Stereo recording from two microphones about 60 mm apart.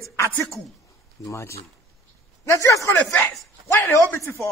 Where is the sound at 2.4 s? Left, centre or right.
Left.